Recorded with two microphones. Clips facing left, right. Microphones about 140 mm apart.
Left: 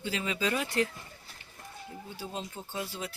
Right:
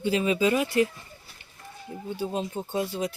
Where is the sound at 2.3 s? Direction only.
20° right (ahead or behind).